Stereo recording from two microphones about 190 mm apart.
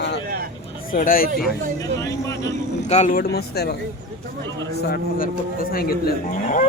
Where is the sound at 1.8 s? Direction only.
15° left (ahead or behind).